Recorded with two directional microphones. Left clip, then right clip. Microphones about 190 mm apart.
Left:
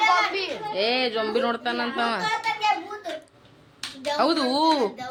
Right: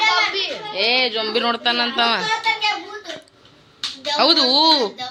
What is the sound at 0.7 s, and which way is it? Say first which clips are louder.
Speech: right 5 dB; 20° left (ahead or behind).